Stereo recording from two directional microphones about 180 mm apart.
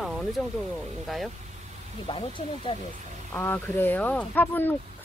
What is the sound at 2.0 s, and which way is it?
Speech, 30° left (ahead or behind).